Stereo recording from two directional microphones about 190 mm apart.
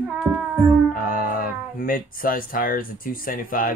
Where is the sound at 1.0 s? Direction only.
45° left (ahead or behind).